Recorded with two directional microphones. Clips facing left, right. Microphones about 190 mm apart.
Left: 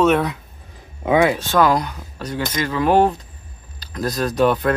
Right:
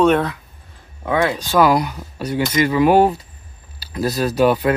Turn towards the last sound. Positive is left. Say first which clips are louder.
# right 2 dB
turn(degrees=-5)  # may be behind; listen again after turning